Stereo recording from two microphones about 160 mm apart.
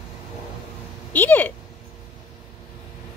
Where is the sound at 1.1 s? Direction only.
10° left (ahead or behind).